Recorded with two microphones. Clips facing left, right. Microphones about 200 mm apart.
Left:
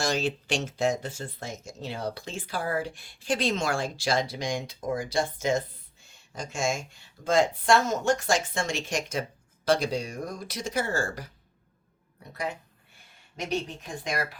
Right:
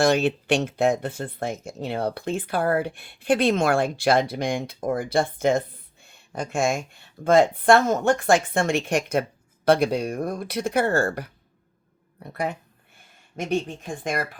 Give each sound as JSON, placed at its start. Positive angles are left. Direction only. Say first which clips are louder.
{"t": 0.0, "sound": "speech", "louder": "right 8 dB", "side_deg": -60}